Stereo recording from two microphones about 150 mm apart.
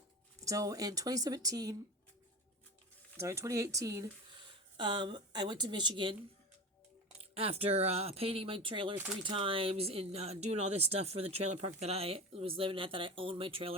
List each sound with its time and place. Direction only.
0.4 s speech: 25° right (ahead or behind)
3.2 s speech: 20° right (ahead or behind)
7.2 s speech: 40° right (ahead or behind)